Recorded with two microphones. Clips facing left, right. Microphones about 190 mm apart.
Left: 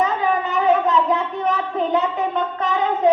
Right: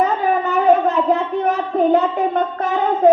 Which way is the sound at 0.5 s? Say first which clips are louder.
Right 3 dB; 50° right (ahead or behind).